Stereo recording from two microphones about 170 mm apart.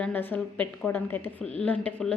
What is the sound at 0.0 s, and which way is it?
A woman's voice, 10° left (ahead or behind).